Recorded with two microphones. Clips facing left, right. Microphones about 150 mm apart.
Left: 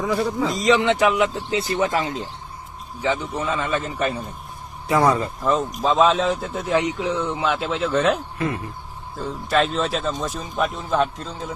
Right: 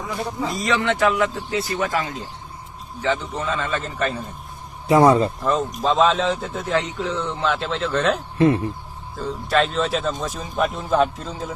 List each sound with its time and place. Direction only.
0.5 s speech: 20° left (ahead or behind)
3.0 s speech: 10° left (ahead or behind)
4.9 s speech: 25° right (ahead or behind)
5.4 s speech: centre (ahead or behind)
6.7 s speech: 10° left (ahead or behind)
8.4 s speech: 30° right (ahead or behind)
9.1 s speech: centre (ahead or behind)